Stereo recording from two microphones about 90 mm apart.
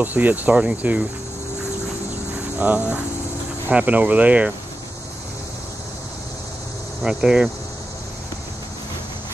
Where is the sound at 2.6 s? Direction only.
20° right (ahead or behind).